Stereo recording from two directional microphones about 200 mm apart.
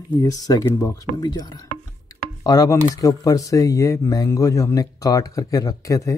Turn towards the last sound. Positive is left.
turn(degrees=15)  # may be behind; listen again after turning